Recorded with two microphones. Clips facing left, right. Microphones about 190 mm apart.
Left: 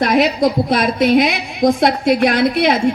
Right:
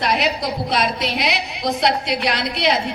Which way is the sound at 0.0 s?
50° left (ahead or behind).